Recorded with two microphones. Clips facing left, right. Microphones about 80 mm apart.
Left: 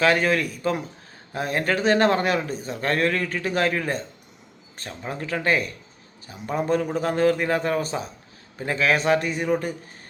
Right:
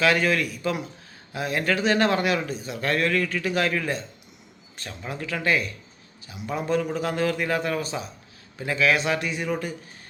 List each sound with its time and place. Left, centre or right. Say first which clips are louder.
0.0 s speech: left 2 dB; left